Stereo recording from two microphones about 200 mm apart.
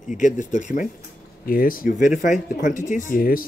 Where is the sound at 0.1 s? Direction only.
40° left (ahead or behind).